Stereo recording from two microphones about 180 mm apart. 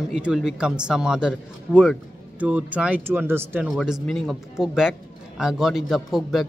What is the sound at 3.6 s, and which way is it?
A man's voice, centre (ahead or behind).